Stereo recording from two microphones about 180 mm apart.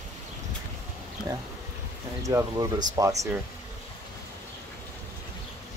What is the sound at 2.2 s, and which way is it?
Speech, 20° right (ahead or behind).